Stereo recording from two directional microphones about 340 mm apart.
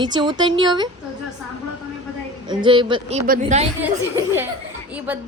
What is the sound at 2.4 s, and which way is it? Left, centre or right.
Speech, centre.